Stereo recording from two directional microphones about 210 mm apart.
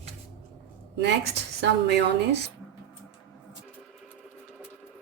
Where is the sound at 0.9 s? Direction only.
55° right (ahead or behind).